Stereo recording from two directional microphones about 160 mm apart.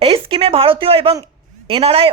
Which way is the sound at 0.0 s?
35° right (ahead or behind).